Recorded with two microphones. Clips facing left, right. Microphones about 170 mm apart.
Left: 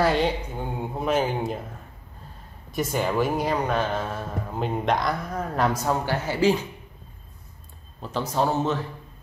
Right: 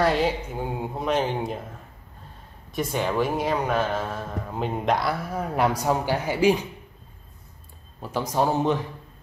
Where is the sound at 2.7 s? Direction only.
Centre (ahead or behind).